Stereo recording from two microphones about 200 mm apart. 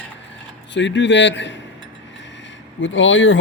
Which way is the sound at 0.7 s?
65° left (ahead or behind).